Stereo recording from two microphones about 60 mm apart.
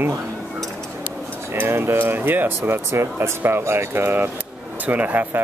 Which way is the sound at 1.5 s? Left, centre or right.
Right.